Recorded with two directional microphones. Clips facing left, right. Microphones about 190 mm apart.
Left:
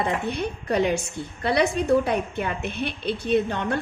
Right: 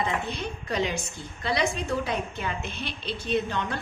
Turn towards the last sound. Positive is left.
turn(degrees=55)  # may be behind; listen again after turning